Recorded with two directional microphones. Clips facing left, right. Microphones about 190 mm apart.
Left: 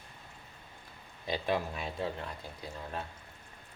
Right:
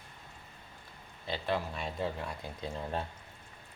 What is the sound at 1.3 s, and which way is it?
Speech, 15° left (ahead or behind).